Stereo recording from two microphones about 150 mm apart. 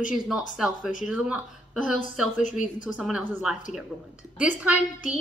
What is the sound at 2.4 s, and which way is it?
Speech, 55° left (ahead or behind).